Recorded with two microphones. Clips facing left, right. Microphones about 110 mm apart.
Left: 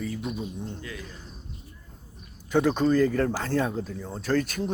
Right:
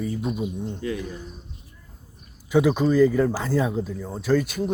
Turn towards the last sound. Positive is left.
turn(degrees=-10)  # may be behind; listen again after turning